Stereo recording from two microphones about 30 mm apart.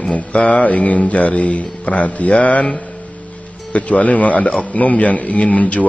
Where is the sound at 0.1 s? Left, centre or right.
Left.